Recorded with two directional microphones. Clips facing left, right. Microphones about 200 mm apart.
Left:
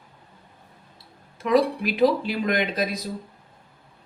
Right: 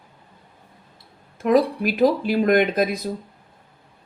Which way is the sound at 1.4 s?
50° right (ahead or behind).